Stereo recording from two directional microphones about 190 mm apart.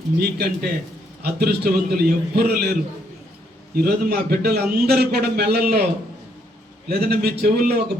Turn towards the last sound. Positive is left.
turn(degrees=-55)  # may be behind; listen again after turning